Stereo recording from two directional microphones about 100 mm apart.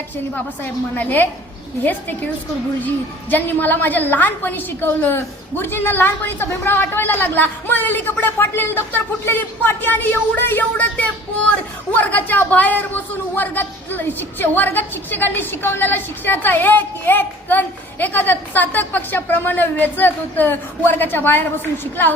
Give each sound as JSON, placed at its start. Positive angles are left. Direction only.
{"t": 0.3, "sound": "a woman's voice", "side_deg": 15}